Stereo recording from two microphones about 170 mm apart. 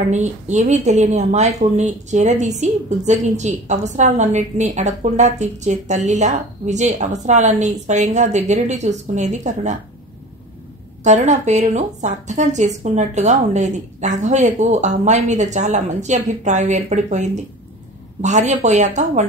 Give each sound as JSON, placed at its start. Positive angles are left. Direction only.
{"t": 0.1, "sound": "speech", "side_deg": -45}
{"t": 11.1, "sound": "speech", "side_deg": -45}